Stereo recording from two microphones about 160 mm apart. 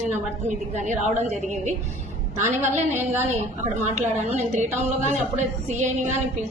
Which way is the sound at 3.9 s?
45° right (ahead or behind).